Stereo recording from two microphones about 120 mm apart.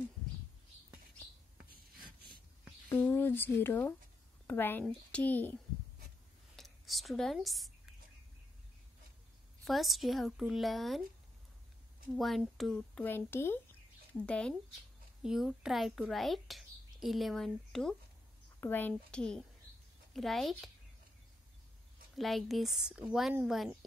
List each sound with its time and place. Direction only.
2.9 s a woman's voice: 15° left (ahead or behind)
6.5 s a sound: centre (ahead or behind)
9.7 s a child's voice: centre (ahead or behind)
12.2 s a child's voice: centre (ahead or behind)
13.0 s speech: 20° left (ahead or behind)
14.2 s a woman's voice: 10° left (ahead or behind)
15.2 s a child's voice: 5° right (ahead or behind)
18.6 s a woman's voice: 15° left (ahead or behind); by 20.7 s centre (ahead or behind)
22.1 s a child's voice: centre (ahead or behind)